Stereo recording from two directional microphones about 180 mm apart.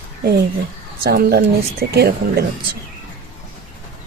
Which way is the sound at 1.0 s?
60° right (ahead or behind).